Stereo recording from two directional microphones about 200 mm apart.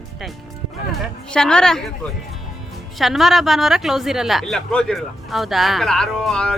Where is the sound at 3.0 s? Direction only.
Centre (ahead or behind).